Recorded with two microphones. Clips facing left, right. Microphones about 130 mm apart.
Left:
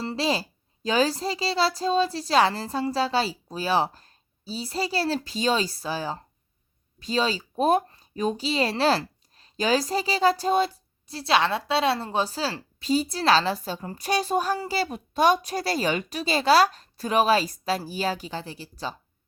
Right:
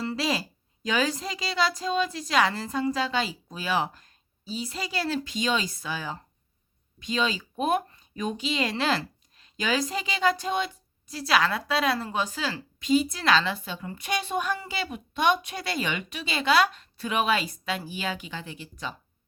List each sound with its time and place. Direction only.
0.0 s speech: 30° left (ahead or behind)